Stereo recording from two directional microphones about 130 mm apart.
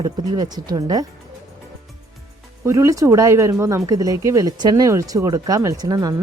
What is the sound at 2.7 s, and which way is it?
A woman's voice, 25° right (ahead or behind).